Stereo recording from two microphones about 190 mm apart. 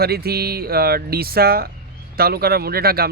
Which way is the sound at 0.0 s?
55° right (ahead or behind).